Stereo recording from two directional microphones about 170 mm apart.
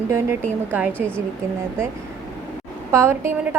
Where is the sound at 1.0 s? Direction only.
5° left (ahead or behind).